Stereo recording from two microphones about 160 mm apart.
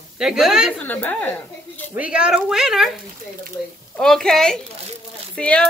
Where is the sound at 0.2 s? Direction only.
5° right (ahead or behind).